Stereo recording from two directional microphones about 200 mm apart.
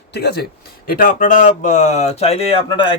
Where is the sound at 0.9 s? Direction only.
45° left (ahead or behind).